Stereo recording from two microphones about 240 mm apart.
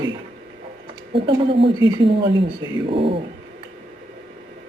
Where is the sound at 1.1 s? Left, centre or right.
Right.